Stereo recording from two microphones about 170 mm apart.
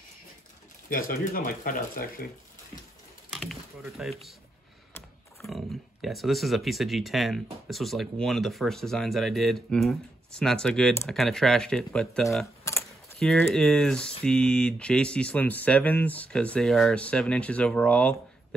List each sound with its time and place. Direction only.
0.8 s speech: 55° left (ahead or behind)
3.3 s a sound: centre (ahead or behind)
4.0 s speech: 5° right (ahead or behind)
5.4 s speech: centre (ahead or behind)